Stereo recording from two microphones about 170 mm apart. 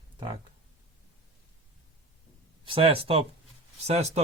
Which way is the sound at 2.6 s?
30° right (ahead or behind).